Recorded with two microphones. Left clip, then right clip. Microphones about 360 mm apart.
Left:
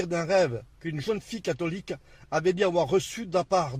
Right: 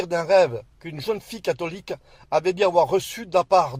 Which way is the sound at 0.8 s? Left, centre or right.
Right.